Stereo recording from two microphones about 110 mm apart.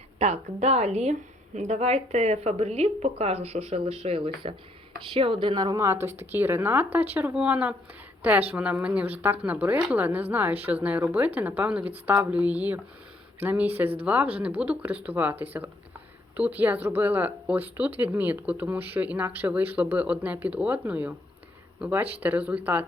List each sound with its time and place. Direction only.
0.2 s a woman's voice: 90° right; by 5.8 s 40° right (ahead or behind)
5.8 s speech: 25° right (ahead or behind)